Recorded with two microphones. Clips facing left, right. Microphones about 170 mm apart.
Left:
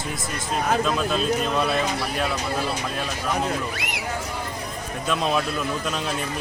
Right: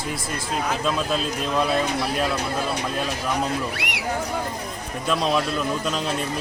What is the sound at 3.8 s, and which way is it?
Speech, 70° right (ahead or behind).